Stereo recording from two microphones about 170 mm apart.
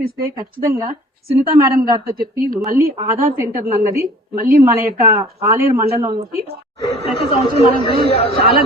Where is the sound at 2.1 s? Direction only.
60° right (ahead or behind).